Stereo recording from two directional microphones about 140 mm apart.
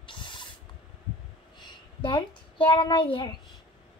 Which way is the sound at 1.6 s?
35° left (ahead or behind).